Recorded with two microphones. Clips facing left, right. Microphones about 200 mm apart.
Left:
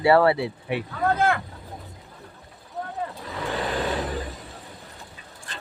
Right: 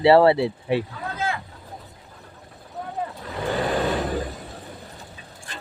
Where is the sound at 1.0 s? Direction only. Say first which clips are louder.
Left 7 dB; 60° left (ahead or behind).